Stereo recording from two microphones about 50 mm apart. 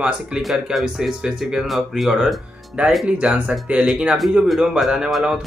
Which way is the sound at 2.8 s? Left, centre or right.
Right.